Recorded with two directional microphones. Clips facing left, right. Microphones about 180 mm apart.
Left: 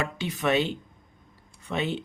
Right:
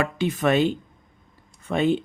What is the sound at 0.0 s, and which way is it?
Speech, 50° right (ahead or behind).